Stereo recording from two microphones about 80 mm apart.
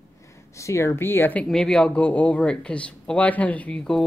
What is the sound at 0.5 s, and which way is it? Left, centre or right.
Speech, left.